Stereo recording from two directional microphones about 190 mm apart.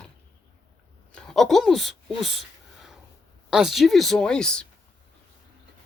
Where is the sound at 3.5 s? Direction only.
Centre (ahead or behind).